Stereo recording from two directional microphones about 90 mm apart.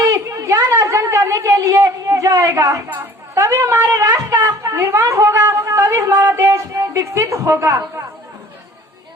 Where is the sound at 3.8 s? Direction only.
45° right (ahead or behind).